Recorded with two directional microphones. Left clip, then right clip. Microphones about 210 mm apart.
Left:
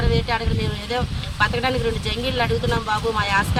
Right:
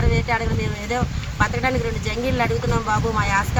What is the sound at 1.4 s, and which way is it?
Speech, 10° left (ahead or behind).